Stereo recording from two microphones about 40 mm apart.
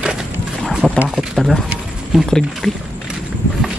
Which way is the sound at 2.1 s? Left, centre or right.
Centre.